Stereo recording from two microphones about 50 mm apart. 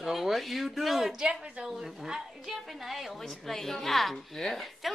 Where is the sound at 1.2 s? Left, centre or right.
Centre.